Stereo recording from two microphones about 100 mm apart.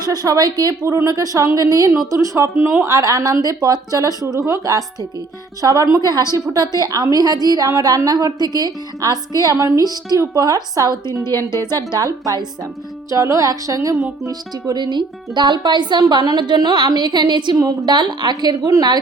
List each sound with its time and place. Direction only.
0.0 s a woman's voice: 40° right (ahead or behind)
17.6 s a woman's voice: 35° right (ahead or behind)
17.9 s speech: 45° right (ahead or behind)